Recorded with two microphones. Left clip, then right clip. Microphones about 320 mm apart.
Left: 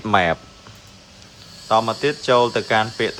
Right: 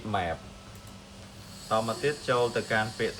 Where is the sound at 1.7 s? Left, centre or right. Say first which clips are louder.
Left 10 dB; centre.